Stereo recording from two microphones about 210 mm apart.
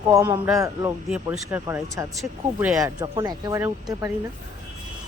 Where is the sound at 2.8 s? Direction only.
15° right (ahead or behind).